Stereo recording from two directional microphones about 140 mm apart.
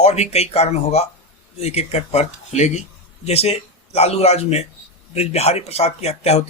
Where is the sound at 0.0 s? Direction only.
50° left (ahead or behind).